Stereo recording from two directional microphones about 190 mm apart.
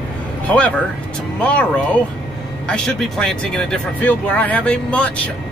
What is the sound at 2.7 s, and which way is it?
Speech, 5° left (ahead or behind).